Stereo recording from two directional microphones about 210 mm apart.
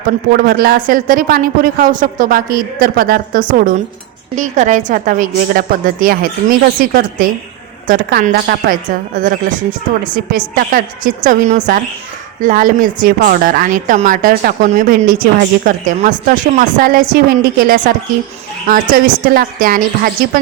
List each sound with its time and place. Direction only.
0.3 s a woman's voice: 45° right (ahead or behind)